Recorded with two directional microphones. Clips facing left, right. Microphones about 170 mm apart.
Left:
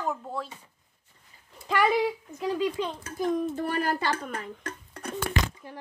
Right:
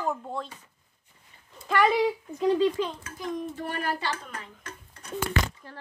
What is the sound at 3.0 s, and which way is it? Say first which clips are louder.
A child's voice: left 6 dB; 45° left (ahead or behind).